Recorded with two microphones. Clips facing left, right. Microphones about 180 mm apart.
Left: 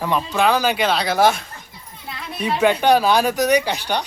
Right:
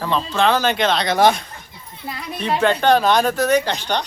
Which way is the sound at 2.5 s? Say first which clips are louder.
Even; 10° left (ahead or behind).